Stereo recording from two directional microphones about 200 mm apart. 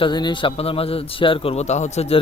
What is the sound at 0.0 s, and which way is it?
A man's voice, 20° left (ahead or behind).